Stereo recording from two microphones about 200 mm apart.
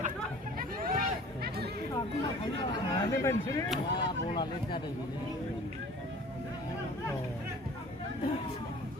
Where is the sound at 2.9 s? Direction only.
15° left (ahead or behind).